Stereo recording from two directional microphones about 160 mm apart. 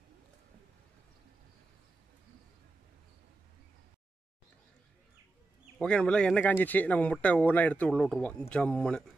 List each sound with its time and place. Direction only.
5.8 s speech: 5° left (ahead or behind)